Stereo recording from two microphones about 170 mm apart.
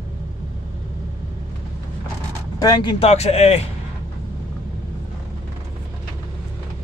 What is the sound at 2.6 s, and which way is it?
A man's voice, 25° left (ahead or behind).